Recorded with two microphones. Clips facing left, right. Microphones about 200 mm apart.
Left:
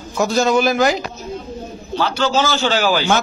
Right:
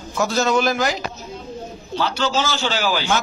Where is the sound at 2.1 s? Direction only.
55° left (ahead or behind).